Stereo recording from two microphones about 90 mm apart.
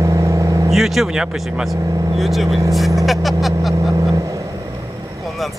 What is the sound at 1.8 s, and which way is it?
Speech, 40° right (ahead or behind).